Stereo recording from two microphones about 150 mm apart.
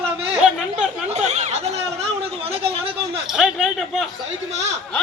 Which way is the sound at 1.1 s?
50° right (ahead or behind).